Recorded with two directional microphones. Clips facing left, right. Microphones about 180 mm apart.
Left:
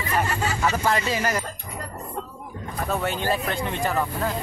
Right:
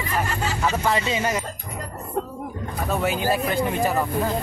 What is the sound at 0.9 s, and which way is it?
Speech, 25° right (ahead or behind).